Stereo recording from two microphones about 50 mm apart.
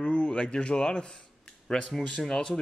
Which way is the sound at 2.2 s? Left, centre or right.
Centre.